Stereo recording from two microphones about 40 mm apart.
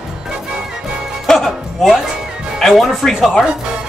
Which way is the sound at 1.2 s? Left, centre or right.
Centre.